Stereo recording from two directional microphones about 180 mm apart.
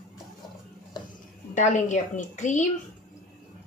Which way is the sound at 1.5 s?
45° left (ahead or behind).